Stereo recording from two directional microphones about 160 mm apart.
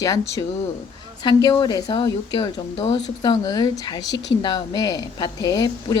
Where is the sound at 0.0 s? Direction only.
20° left (ahead or behind).